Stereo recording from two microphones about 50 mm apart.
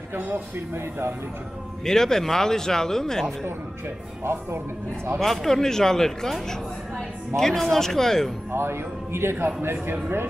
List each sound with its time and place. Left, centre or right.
0.1 s speech: right
1.9 s speech: centre
4.2 s speech: right
5.2 s speech: centre
7.0 s music: centre
7.6 s speech: centre
8.5 s a man's voice: right